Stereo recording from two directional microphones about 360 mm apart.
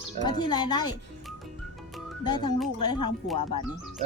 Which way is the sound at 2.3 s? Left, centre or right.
Centre.